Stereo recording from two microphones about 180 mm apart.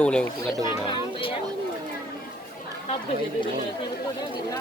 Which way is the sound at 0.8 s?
30° left (ahead or behind).